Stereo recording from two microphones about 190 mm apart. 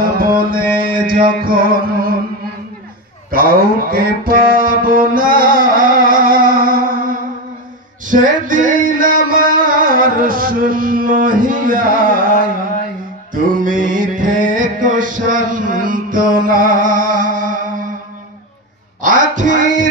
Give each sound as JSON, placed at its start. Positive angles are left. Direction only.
{"t": 0.0, "sound": "music", "side_deg": -50}
{"t": 3.3, "sound": "music", "side_deg": -50}
{"t": 19.0, "sound": "music", "side_deg": -40}